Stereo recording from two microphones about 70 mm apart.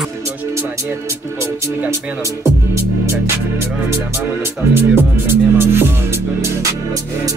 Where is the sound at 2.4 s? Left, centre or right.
Right.